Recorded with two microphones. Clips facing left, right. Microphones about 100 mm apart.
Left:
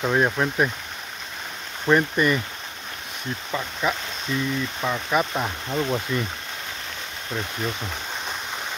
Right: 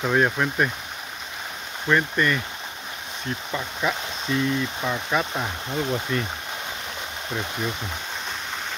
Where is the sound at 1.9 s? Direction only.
15° left (ahead or behind).